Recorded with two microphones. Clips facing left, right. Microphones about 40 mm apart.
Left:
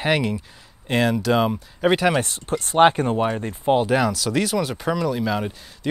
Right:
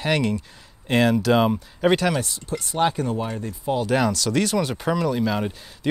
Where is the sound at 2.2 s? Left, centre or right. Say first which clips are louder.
Left 4 dB; left.